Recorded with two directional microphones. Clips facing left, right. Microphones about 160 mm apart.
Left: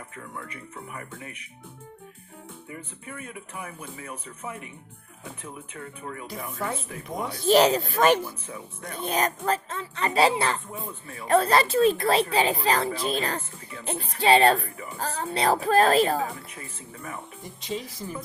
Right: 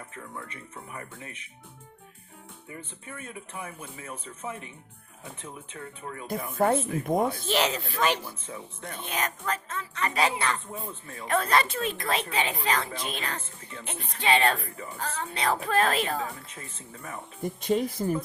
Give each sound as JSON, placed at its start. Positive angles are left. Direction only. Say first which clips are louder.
{"t": 0.3, "sound": "speech", "louder": "left 3 dB", "side_deg": -25}
{"t": 3.2, "sound": "speech", "louder": "even", "side_deg": -25}
{"t": 6.2, "sound": "speech", "louder": "right 8 dB", "side_deg": -50}
{"t": 7.4, "sound": "speech", "louder": "left 8 dB", "side_deg": 40}
{"t": 8.4, "sound": "speech", "louder": "left 1 dB", "side_deg": -25}
{"t": 8.9, "sound": "speech", "louder": "left 6 dB", "side_deg": 35}
{"t": 16.5, "sound": "speech", "louder": "left 2 dB", "side_deg": -25}
{"t": 17.4, "sound": "speech", "louder": "right 9 dB", "side_deg": -55}